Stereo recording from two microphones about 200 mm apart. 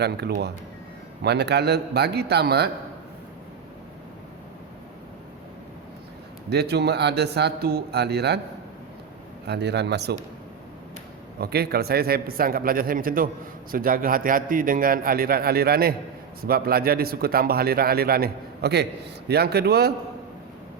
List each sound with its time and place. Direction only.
0.0 s a man's voice: 55° right (ahead or behind)
6.5 s a man's voice: 55° right (ahead or behind)
9.5 s a man's voice: 60° right (ahead or behind)
11.3 s a man's voice: 50° right (ahead or behind)